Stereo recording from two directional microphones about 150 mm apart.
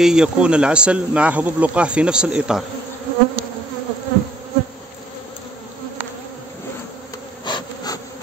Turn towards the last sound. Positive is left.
turn(degrees=30)  # may be behind; listen again after turning